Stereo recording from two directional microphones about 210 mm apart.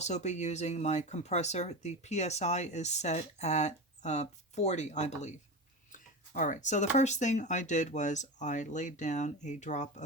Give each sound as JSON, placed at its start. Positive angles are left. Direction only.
{"t": 0.0, "sound": "speech", "side_deg": 35}